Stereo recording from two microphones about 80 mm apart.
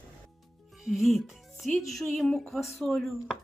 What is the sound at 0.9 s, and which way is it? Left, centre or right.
Speech, centre.